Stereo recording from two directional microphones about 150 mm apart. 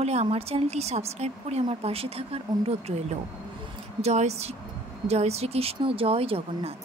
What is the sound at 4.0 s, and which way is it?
A woman's voice, 45° right (ahead or behind).